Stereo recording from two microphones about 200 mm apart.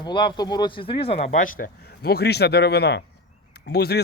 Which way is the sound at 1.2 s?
45° left (ahead or behind).